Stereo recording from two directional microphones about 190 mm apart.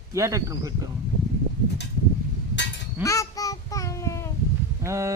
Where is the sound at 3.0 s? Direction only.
15° left (ahead or behind).